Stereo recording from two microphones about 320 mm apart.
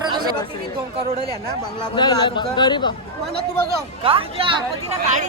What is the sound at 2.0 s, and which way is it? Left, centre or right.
Speech, centre.